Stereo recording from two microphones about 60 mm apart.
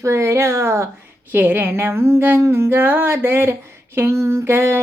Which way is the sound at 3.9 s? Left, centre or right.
Right.